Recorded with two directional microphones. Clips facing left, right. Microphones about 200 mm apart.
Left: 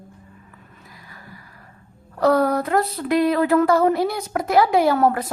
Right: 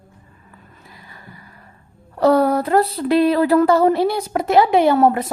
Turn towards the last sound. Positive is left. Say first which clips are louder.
# right 3 dB
turn(degrees=-25)  # may be behind; listen again after turning